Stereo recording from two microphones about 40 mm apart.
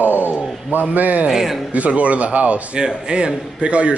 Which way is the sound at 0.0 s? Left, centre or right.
Right.